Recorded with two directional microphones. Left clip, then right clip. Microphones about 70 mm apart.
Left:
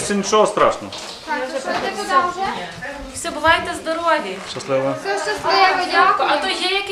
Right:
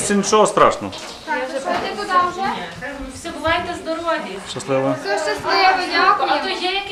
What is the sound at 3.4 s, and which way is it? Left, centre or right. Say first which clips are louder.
Speech: left 4 dB; left.